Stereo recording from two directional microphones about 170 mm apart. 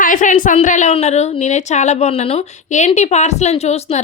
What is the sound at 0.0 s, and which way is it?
A woman's voice, 50° left (ahead or behind).